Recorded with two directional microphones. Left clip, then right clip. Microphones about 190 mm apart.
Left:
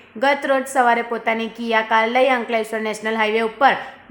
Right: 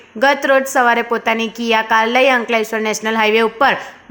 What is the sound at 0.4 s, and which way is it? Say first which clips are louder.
A woman's voice: right 4 dB; 15° right (ahead or behind).